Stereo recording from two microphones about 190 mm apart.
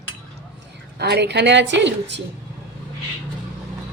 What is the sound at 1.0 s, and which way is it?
A woman's voice, 60° right (ahead or behind).